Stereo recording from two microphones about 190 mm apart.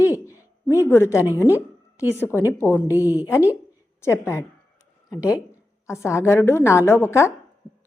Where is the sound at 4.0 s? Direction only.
15° left (ahead or behind).